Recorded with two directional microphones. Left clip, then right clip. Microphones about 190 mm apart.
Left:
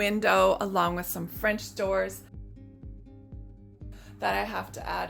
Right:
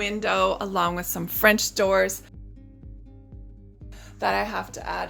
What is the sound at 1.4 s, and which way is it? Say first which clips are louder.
Speech: right 9 dB; 55° right (ahead or behind).